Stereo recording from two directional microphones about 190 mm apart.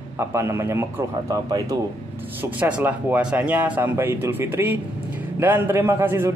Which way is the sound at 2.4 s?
5° right (ahead or behind).